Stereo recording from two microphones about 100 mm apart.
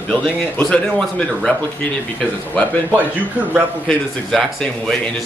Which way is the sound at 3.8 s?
5° left (ahead or behind).